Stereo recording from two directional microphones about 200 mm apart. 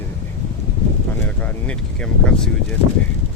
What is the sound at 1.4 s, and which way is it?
Speech, 5° left (ahead or behind).